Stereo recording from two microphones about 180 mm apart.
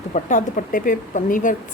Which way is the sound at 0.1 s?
45° left (ahead or behind).